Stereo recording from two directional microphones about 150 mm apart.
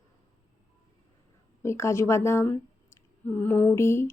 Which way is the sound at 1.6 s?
20° left (ahead or behind).